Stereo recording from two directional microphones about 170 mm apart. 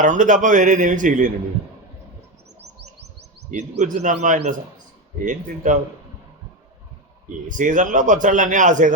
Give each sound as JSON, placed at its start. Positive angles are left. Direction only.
{"t": 0.0, "sound": "a man's voice", "side_deg": -50}
{"t": 3.5, "sound": "a man's voice", "side_deg": -45}
{"t": 7.4, "sound": "a man's voice", "side_deg": -50}